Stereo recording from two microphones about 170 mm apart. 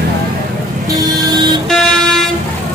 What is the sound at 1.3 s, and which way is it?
Vehicle, 25° right (ahead or behind).